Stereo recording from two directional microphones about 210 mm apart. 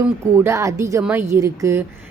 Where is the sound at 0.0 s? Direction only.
15° right (ahead or behind).